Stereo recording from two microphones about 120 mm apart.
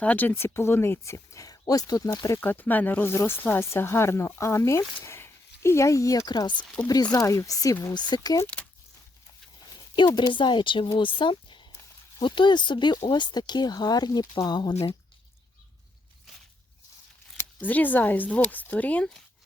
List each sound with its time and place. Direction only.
0.0 s speech: 15° left (ahead or behind)
2.4 s speech: 15° left (ahead or behind)
7.9 s speech: 35° left (ahead or behind)
9.9 s speech: 40° left (ahead or behind)
17.3 s speech: 15° left (ahead or behind)